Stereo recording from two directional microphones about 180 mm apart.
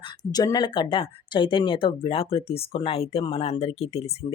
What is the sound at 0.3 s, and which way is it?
Speech, 20° left (ahead or behind).